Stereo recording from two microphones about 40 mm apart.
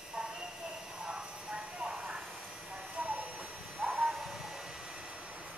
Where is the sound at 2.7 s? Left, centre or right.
Right.